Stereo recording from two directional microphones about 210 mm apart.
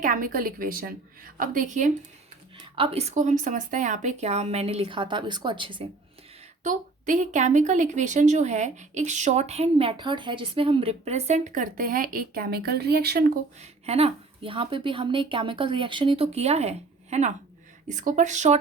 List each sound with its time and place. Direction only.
0.0 s a woman's voice: 40° right (ahead or behind); by 5.8 s 25° right (ahead or behind)
6.6 s a woman's voice: 35° right (ahead or behind)
13.6 s a woman's voice: 30° right (ahead or behind)